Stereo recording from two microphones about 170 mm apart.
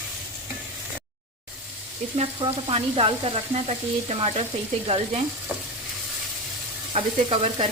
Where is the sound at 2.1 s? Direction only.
35° right (ahead or behind).